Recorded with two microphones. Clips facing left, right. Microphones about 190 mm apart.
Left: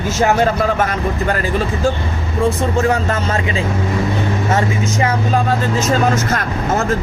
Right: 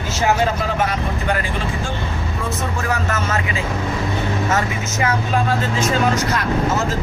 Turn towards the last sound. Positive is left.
turn(degrees=50)  # may be behind; listen again after turning